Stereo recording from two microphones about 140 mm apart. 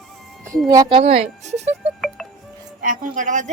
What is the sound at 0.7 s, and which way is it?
Speech, 25° right (ahead or behind).